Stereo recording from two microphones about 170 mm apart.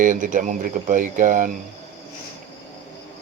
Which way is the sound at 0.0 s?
50° right (ahead or behind).